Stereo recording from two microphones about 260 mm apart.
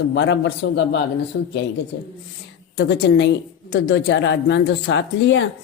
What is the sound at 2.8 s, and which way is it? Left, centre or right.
A woman's voice, left.